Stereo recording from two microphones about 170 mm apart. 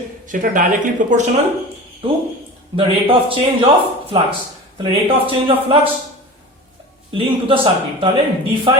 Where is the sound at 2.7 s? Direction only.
30° right (ahead or behind).